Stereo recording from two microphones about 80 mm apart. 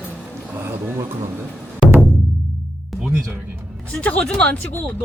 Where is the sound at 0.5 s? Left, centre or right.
Right.